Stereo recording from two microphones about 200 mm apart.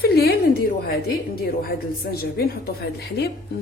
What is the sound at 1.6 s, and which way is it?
A woman's voice, 50° left (ahead or behind).